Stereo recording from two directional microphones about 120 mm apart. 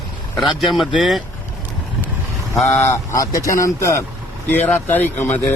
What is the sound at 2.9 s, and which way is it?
Speech, 25° left (ahead or behind).